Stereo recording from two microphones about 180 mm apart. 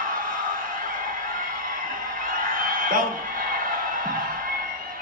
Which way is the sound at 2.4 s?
50° right (ahead or behind).